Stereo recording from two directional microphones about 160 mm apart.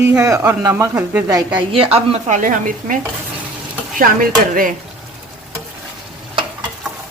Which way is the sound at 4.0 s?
60° right (ahead or behind).